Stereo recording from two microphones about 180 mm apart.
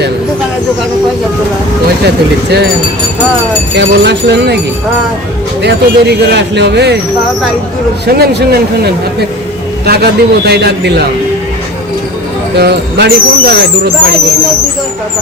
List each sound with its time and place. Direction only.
2.0 s speech: 65° right (ahead or behind)
3.8 s speech: 70° right (ahead or behind)
5.6 s speech: 70° right (ahead or behind)
8.0 s speech: 60° right (ahead or behind)
12.5 s speech: 65° right (ahead or behind)